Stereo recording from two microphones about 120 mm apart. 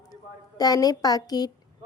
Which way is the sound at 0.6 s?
30° left (ahead or behind).